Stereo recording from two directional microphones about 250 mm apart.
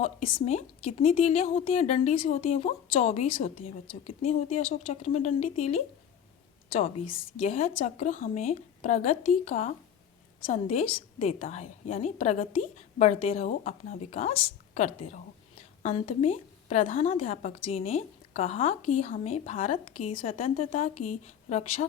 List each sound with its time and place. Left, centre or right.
0.0 s a woman's voice: left
7.1 s a woman's voice: left